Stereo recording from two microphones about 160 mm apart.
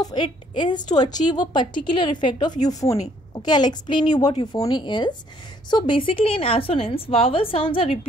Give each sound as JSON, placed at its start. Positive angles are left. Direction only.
{"t": 0.0, "sound": "a woman's voice", "side_deg": 30}